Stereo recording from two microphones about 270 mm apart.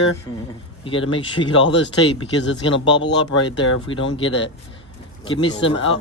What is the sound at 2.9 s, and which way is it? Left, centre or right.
Speech, left.